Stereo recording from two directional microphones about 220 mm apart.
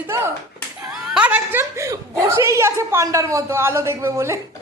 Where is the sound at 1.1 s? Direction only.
5° right (ahead or behind).